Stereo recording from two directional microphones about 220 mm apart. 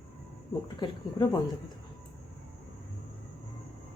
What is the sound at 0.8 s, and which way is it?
Speech, 20° left (ahead or behind).